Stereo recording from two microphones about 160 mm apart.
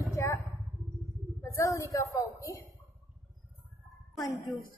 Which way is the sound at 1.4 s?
20° left (ahead or behind).